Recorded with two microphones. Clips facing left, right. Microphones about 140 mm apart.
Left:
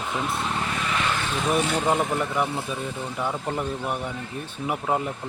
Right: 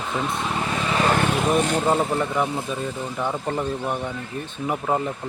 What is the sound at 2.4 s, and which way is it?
Speech, 20° right (ahead or behind).